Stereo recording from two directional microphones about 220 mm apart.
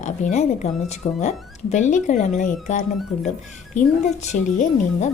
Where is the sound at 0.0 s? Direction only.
30° left (ahead or behind).